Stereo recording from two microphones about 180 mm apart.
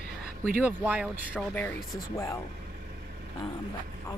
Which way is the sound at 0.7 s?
10° right (ahead or behind).